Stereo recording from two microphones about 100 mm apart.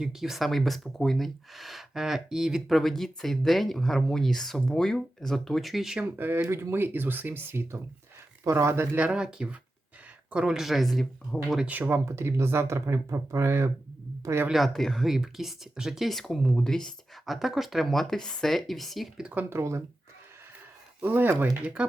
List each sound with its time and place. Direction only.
0.0 s speech: 5° right (ahead or behind)
6.1 s speech: 20° right (ahead or behind); by 11.0 s centre (ahead or behind)
11.6 s speech: 15° right (ahead or behind)
14.5 s speech: centre (ahead or behind); by 19.8 s 25° right (ahead or behind)
21.0 s speech: 20° right (ahead or behind)